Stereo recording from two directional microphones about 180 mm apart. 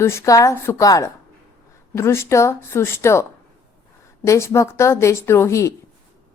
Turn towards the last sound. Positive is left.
turn(degrees=15)  # may be behind; listen again after turning